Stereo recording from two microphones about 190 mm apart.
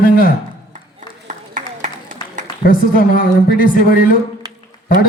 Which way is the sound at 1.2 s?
40° right (ahead or behind).